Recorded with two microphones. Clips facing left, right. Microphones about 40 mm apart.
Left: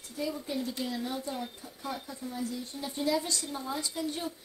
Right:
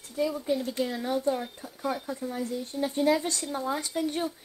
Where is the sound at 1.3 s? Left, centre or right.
Right.